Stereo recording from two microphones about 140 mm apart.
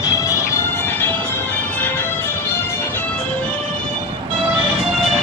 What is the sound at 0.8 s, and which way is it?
Music, 15° left (ahead or behind).